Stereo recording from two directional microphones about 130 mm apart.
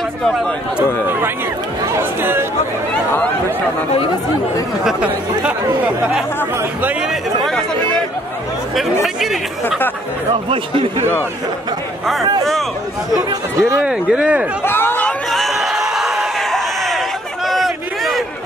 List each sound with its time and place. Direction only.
0.2 s speech: centre (ahead or behind)
1.9 s speech: 15° right (ahead or behind)
4.8 s speech: 10° right (ahead or behind)
9.0 s speech: centre (ahead or behind)
10.3 s speech: 40° right (ahead or behind)
13.1 s speech: 25° right (ahead or behind)
13.8 s speech: 10° right (ahead or behind)
14.6 s chatter: 15° left (ahead or behind)
15.3 s a sound: centre (ahead or behind)